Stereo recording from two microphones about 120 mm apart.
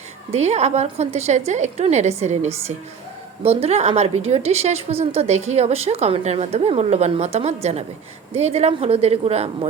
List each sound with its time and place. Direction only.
0.3 s a woman's voice: 70° right (ahead or behind)
3.4 s a woman's voice: 55° right (ahead or behind)